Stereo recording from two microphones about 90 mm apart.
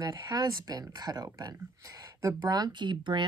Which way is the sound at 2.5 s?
55° right (ahead or behind).